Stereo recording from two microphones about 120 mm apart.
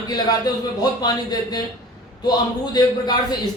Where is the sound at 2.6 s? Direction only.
35° left (ahead or behind).